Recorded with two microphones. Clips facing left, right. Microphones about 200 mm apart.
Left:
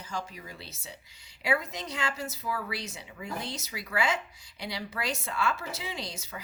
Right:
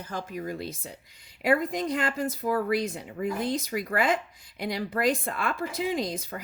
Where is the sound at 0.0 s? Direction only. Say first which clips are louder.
Right 5 dB; 55° right (ahead or behind).